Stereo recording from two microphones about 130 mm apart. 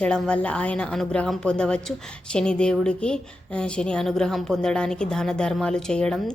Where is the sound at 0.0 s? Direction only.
5° left (ahead or behind).